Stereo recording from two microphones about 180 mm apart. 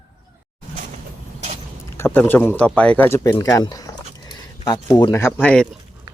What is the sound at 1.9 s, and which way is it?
Speech, 10° left (ahead or behind).